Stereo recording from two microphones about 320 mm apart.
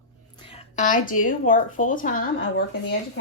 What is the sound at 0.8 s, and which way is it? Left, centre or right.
Speech, left.